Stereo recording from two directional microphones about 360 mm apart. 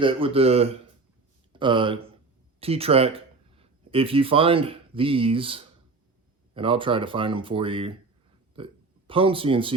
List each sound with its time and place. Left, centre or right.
0.0 s speech: centre